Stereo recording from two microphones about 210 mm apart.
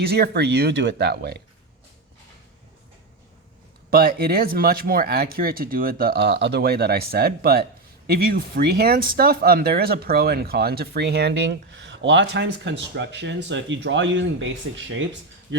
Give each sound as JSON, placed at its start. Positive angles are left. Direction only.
{"t": 0.0, "sound": "speech", "side_deg": -50}
{"t": 3.8, "sound": "speech", "side_deg": -45}